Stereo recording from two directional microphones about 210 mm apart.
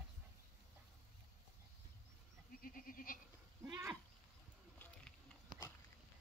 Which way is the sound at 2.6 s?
40° left (ahead or behind).